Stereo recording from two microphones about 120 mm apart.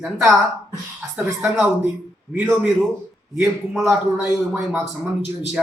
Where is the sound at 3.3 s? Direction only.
Centre (ahead or behind).